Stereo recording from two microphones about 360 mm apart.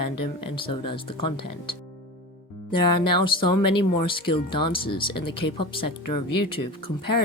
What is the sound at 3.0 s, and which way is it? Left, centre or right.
Speech, centre.